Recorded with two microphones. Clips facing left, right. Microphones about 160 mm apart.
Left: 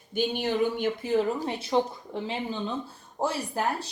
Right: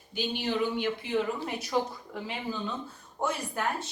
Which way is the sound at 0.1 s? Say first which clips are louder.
Left 4 dB; 50° left (ahead or behind).